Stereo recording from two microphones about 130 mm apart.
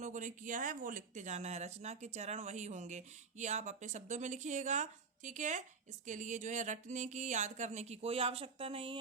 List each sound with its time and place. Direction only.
0.0 s speech: 75° right (ahead or behind); by 9.0 s 45° right (ahead or behind)